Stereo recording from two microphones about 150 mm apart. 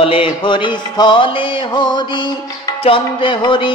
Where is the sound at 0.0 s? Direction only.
35° left (ahead or behind).